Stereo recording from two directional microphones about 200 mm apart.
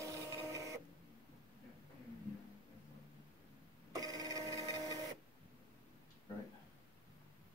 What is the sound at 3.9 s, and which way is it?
Printer, 20° right (ahead or behind).